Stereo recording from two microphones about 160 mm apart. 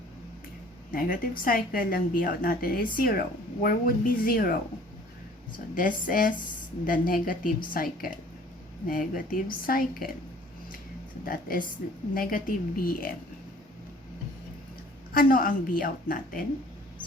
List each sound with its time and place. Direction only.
0.9 s a woman's voice: 60° left (ahead or behind)
5.7 s a woman's voice: 60° left (ahead or behind)
11.3 s a woman's voice: 65° left (ahead or behind)
15.1 s a woman's voice: 60° left (ahead or behind)